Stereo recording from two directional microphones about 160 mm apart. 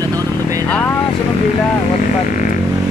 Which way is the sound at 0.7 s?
10° left (ahead or behind).